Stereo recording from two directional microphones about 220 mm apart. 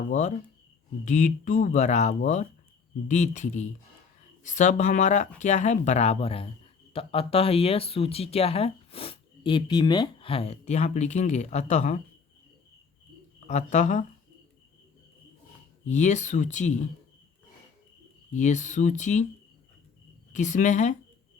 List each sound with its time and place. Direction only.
0.1 s speech: 35° left (ahead or behind)
13.5 s speech: 35° left (ahead or behind)
15.9 s speech: 35° left (ahead or behind)
18.3 s speech: 35° left (ahead or behind)
20.3 s speech: 35° left (ahead or behind)